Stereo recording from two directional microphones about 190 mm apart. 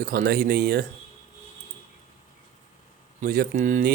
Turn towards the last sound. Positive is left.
turn(degrees=-40)  # may be behind; listen again after turning